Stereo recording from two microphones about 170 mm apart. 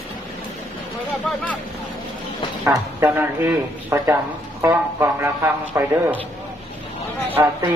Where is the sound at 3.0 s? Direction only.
10° right (ahead or behind).